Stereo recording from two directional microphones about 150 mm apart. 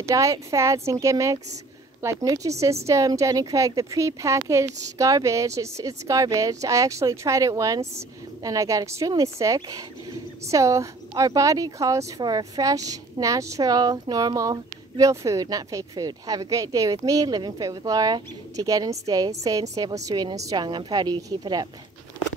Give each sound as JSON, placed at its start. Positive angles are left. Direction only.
{"t": 0.0, "sound": "speech", "side_deg": -20}